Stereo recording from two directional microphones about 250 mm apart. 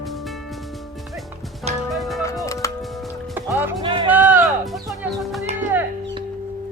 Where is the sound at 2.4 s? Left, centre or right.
Centre.